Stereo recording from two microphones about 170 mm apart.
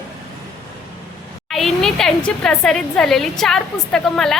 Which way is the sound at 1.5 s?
Centre (ahead or behind).